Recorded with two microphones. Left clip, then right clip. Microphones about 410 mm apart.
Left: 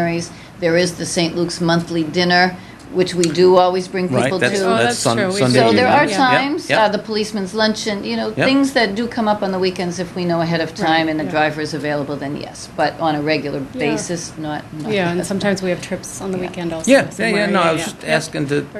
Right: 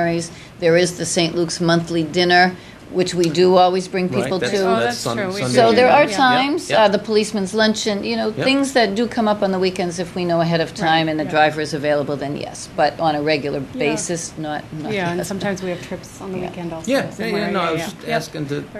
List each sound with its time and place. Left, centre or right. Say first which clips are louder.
0.0 s a woman's voice: even; right
4.7 s speech: left 4 dB; left
5.1 s a woman's voice: left 5 dB; centre
5.5 s a woman's voice: right 2 dB; right
14.9 s a woman's voice: left 3 dB; centre
16.8 s speech: left 7 dB; left